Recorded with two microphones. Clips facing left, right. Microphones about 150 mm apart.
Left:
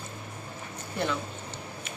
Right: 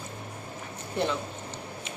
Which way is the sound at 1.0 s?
25° right (ahead or behind).